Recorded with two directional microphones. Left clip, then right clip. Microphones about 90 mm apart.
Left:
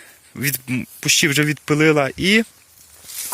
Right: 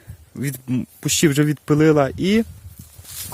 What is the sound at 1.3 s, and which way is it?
Speech, 70° right (ahead or behind).